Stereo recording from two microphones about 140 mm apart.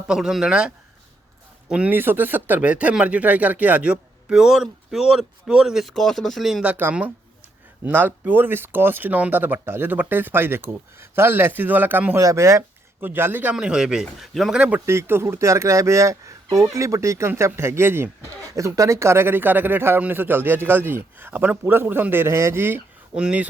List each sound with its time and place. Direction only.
0.1 s a man's voice: 5° right (ahead or behind)
1.7 s speech: 10° right (ahead or behind)
14.8 s speech: 20° right (ahead or behind)